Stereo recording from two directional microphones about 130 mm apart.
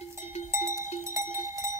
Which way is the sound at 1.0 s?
20° right (ahead or behind).